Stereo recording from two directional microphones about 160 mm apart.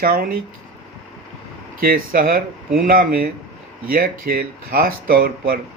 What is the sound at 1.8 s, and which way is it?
Speech, 65° right (ahead or behind).